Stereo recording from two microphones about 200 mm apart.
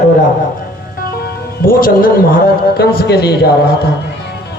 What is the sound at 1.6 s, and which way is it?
A man's voice, 45° left (ahead or behind).